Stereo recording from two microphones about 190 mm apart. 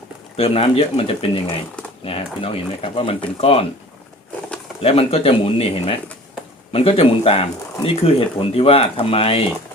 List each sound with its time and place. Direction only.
0.3 s speech: 30° left (ahead or behind)
4.8 s speech: 30° left (ahead or behind)